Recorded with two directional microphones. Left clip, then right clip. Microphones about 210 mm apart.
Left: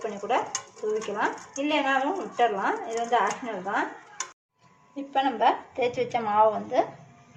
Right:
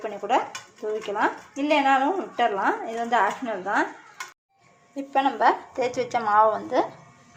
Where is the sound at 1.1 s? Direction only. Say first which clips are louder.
Right 3 dB; 20° right (ahead or behind).